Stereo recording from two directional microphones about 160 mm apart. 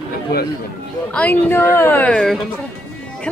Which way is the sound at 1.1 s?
10° left (ahead or behind).